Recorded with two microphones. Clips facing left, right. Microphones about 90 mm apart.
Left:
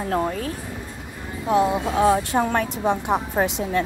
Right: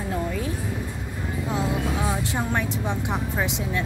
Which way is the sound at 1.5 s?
65° left (ahead or behind).